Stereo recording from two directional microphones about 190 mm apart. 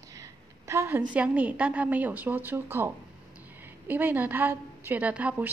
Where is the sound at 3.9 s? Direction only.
10° right (ahead or behind).